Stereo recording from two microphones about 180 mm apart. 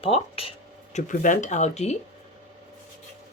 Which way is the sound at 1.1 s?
45° left (ahead or behind).